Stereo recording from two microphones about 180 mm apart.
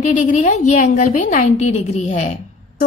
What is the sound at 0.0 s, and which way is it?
A woman's voice, 45° left (ahead or behind).